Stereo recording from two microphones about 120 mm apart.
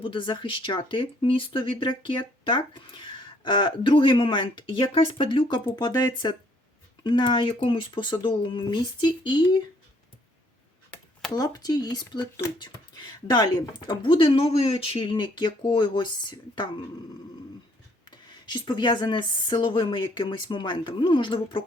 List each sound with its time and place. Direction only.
0.0 s speech: 40° left (ahead or behind)
10.9 s a sound: 10° left (ahead or behind)
11.3 s speech: 30° left (ahead or behind)
18.1 s speech: 40° left (ahead or behind)